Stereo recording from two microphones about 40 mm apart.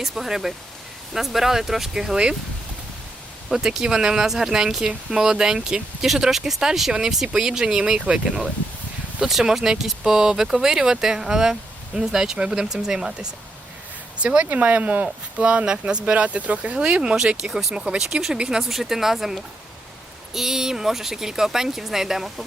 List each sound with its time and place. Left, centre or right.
0.0 s speech: centre
3.8 s speech: centre
9.4 s speech: centre
14.2 s speech: right
16.7 s speech: right
17.4 s speech: centre
17.7 s speech: right
18.7 s speech: centre